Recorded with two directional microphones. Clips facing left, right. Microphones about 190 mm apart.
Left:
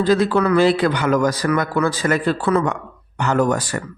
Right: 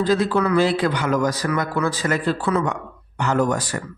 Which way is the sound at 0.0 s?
65° left (ahead or behind).